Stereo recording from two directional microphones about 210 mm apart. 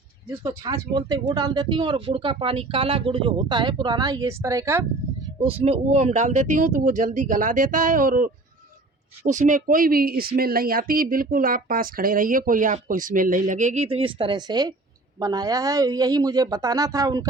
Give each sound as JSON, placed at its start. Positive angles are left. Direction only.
{"t": 0.3, "sound": "speech", "side_deg": -20}
{"t": 5.4, "sound": "speech", "side_deg": -25}